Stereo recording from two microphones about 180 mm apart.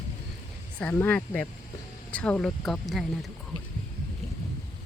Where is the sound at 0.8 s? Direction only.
10° left (ahead or behind).